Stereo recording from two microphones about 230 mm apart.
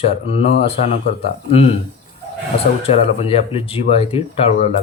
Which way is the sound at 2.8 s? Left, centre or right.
Left.